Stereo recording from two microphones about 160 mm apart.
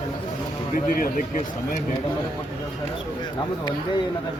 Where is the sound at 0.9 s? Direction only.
60° left (ahead or behind).